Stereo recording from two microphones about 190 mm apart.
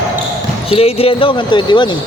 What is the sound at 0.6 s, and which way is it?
Speech, 30° left (ahead or behind).